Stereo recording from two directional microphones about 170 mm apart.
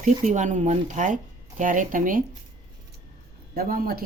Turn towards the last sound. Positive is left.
turn(degrees=-55)  # may be behind; listen again after turning